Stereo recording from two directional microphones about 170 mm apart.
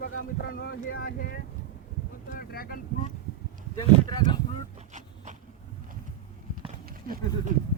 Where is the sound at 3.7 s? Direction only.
25° left (ahead or behind).